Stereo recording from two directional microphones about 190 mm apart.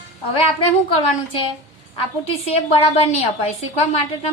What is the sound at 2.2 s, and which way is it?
A woman's voice, 30° left (ahead or behind).